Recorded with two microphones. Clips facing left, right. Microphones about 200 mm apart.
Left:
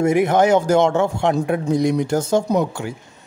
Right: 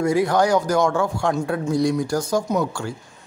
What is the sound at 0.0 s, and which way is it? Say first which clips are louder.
Speech: left 3 dB; 20° left (ahead or behind).